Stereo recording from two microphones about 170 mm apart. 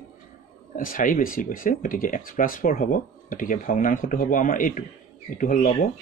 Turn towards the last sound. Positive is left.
turn(degrees=50)  # may be behind; listen again after turning